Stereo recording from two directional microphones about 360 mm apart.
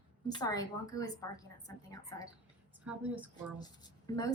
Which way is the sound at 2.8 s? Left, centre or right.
Centre.